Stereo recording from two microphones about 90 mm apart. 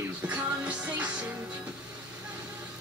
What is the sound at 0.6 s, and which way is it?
Music, 15° right (ahead or behind).